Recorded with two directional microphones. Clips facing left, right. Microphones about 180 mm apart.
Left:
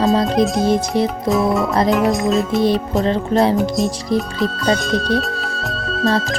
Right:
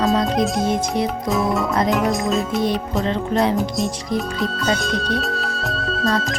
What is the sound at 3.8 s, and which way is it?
Speech, centre (ahead or behind).